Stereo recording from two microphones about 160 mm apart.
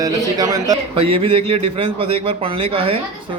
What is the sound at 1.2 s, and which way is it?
A man's voice, 35° right (ahead or behind).